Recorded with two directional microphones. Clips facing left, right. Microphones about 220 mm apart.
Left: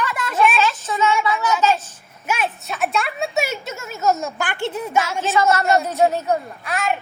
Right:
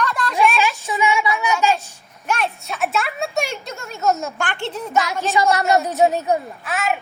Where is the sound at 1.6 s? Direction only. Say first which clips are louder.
Even; 15° right (ahead or behind).